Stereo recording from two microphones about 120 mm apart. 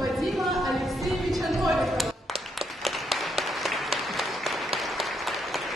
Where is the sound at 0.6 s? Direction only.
Centre (ahead or behind).